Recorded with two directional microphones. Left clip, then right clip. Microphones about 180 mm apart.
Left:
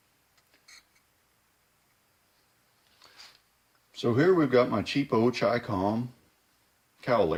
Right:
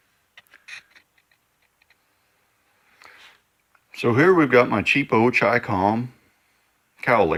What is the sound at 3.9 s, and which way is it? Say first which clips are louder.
Speech: right 7 dB; 40° right (ahead or behind).